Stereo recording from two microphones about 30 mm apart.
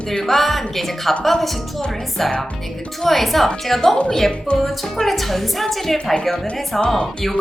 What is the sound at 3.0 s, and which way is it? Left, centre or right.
A woman's voice, centre.